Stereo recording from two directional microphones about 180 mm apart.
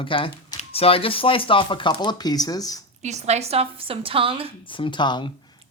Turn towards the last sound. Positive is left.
turn(degrees=25)  # may be behind; listen again after turning